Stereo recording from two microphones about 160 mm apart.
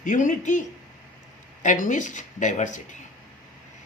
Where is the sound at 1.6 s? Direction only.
55° left (ahead or behind).